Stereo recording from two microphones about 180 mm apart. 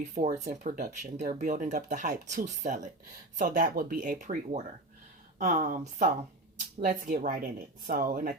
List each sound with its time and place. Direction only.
0.1 s speech: 45° right (ahead or behind)